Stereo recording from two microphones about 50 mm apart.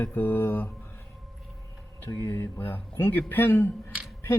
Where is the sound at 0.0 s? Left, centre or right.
Left.